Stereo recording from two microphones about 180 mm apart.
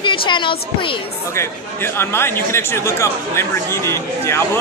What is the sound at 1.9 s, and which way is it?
Speech, 15° left (ahead or behind).